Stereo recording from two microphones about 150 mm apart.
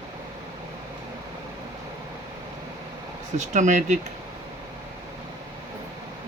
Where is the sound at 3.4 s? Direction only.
55° right (ahead or behind).